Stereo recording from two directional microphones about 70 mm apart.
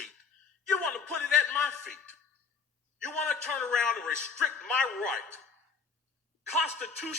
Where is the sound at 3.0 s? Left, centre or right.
Centre.